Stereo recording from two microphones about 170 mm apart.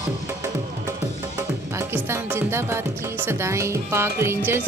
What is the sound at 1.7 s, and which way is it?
Music, 15° right (ahead or behind).